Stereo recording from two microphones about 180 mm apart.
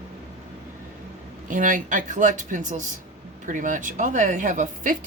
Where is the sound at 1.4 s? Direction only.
45° right (ahead or behind).